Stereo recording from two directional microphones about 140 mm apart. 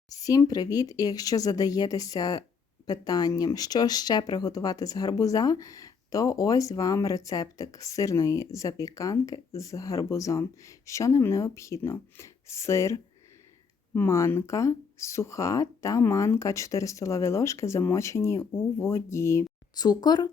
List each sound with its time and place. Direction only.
0.1 s speech: 25° left (ahead or behind)